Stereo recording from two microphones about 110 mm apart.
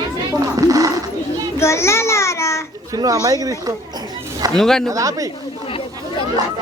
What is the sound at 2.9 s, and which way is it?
Speech, 30° right (ahead or behind).